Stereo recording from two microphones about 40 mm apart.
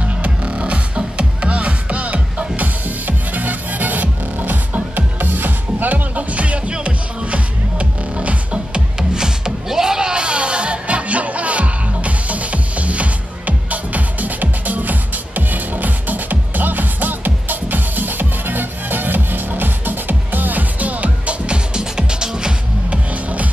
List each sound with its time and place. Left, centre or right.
0.0 s music: right
9.1 s music: centre; by 21.5 s right
21.7 s music: centre